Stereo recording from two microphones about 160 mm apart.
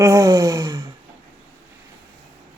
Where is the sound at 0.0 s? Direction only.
20° right (ahead or behind).